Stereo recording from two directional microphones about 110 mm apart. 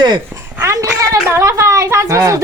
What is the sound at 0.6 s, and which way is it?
Speech, 25° right (ahead or behind).